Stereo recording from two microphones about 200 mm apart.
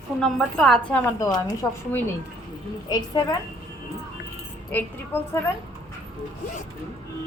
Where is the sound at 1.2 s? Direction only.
20° left (ahead or behind).